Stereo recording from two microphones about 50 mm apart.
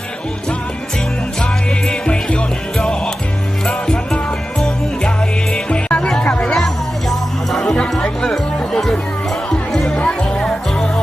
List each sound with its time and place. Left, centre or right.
1.9 s music: centre
6.4 s music: centre